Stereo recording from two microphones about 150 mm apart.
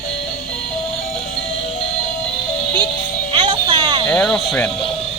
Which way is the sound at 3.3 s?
35° right (ahead or behind).